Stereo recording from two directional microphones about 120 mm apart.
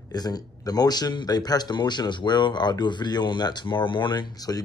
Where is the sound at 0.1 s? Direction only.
35° left (ahead or behind).